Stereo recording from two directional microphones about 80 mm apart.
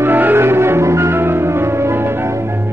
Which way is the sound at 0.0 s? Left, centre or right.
Right.